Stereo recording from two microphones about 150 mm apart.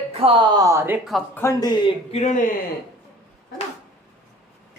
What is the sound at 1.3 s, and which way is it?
Speech, 20° left (ahead or behind).